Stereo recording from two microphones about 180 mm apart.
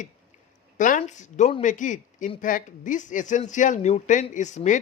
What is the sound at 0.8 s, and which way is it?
Speech, 45° left (ahead or behind).